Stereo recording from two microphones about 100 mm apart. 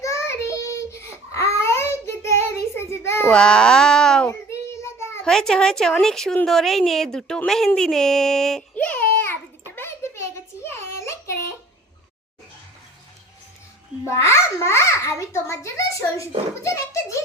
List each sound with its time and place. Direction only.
0.0 s child singing: 30° left (ahead or behind)
3.3 s speech: 10° left (ahead or behind)
4.3 s child singing: 30° left (ahead or behind)
5.2 s a woman's voice: 5° left (ahead or behind)
8.7 s a sound: 15° left (ahead or behind)
14.0 s a child's voice: 25° left (ahead or behind)